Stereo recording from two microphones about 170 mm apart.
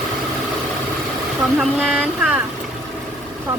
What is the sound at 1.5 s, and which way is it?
Speech, 5° right (ahead or behind).